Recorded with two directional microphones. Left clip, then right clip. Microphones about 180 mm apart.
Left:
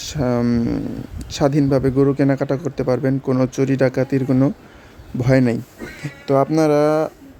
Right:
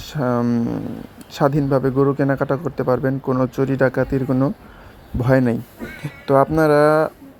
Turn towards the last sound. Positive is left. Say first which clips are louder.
# right 2 dB
turn(degrees=5)  # may be behind; listen again after turning